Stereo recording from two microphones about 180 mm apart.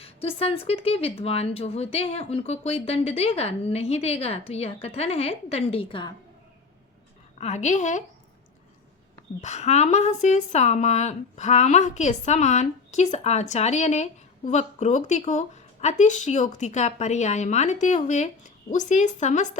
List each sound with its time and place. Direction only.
0.0 s speech: 35° left (ahead or behind)
7.3 s speech: 40° left (ahead or behind)
9.4 s speech: 40° left (ahead or behind)